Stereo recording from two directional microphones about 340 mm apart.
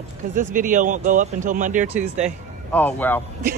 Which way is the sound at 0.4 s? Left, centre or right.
Right.